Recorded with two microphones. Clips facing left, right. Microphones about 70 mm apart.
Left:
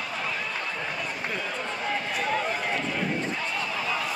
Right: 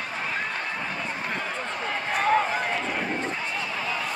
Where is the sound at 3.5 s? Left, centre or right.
Centre.